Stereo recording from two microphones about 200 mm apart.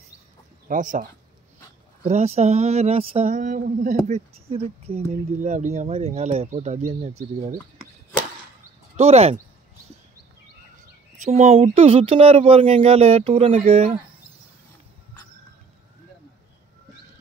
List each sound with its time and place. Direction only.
0.7 s speech: 40° right (ahead or behind)
2.0 s speech: 30° right (ahead or behind)
8.9 s speech: 30° right (ahead or behind)
11.2 s speech: 35° right (ahead or behind)